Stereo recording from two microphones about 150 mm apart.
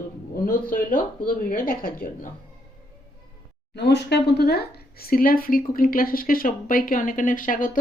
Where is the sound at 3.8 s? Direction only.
90° left.